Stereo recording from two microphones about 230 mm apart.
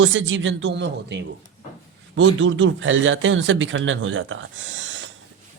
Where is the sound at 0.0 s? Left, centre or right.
Right.